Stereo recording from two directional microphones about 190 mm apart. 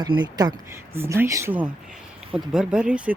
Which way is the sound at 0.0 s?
20° right (ahead or behind).